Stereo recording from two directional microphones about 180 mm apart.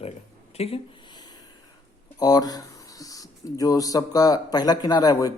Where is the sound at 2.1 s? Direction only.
20° left (ahead or behind).